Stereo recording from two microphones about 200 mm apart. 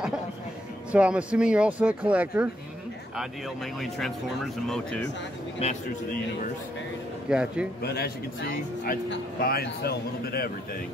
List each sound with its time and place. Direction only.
0.9 s speech: 5° right (ahead or behind)
4.6 s speech: centre (ahead or behind)
5.6 s a man's voice: 30° left (ahead or behind)
7.2 s speech: 5° right (ahead or behind)
7.8 s a man's voice: 50° left (ahead or behind)